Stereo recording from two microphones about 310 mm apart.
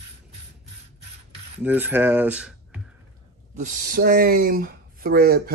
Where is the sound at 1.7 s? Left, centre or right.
Centre.